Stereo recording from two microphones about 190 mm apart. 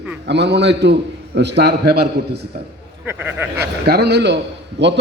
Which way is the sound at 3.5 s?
60° right (ahead or behind).